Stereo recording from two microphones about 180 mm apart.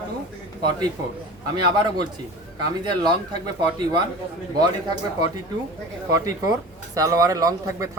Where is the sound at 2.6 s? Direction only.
20° right (ahead or behind).